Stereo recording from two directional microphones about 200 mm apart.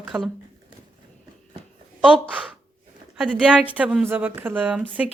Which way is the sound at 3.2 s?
5° right (ahead or behind).